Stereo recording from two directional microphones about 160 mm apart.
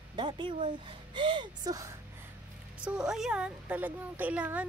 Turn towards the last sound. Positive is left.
turn(degrees=-10)  # may be behind; listen again after turning